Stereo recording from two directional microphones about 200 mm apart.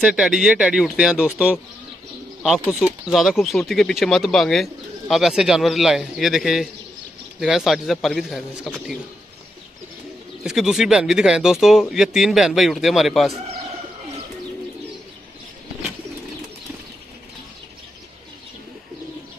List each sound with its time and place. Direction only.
0.0 s speech: 5° right (ahead or behind)
10.4 s speech: centre (ahead or behind)